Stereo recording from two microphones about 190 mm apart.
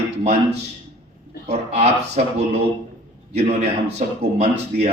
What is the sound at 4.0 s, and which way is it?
Speech, 35° right (ahead or behind).